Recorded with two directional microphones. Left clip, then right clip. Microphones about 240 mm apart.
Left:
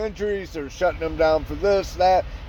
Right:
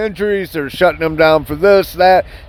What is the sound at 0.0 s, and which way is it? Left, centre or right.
Speech, right.